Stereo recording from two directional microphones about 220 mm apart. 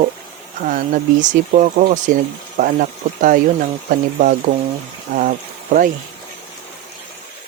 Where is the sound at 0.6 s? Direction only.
35° right (ahead or behind).